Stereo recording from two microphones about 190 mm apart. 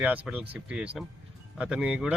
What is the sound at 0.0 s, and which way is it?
A man's voice, 5° right (ahead or behind).